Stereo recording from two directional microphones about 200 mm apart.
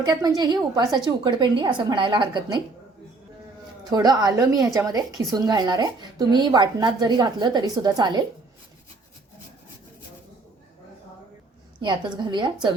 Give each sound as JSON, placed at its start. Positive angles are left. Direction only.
{"t": 0.0, "sound": "speech", "side_deg": -20}
{"t": 3.8, "sound": "speech", "side_deg": -20}
{"t": 11.8, "sound": "speech", "side_deg": -20}